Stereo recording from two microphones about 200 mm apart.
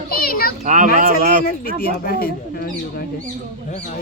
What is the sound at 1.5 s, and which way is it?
Speech, 45° left (ahead or behind).